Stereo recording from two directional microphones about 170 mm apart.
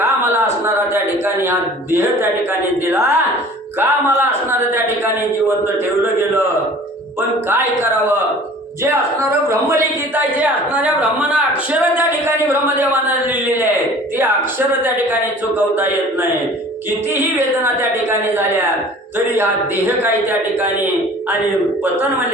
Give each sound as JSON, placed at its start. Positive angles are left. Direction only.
{"t": 0.0, "sound": "a sound", "side_deg": -15}
{"t": 1.2, "sound": "a man's voice", "side_deg": -15}
{"t": 7.2, "sound": "a man's voice", "side_deg": -15}
{"t": 9.5, "sound": "a man's voice", "side_deg": -15}
{"t": 14.7, "sound": "a man's voice", "side_deg": -10}
{"t": 17.2, "sound": "a man's voice", "side_deg": -15}
{"t": 19.4, "sound": "a man's voice", "side_deg": -10}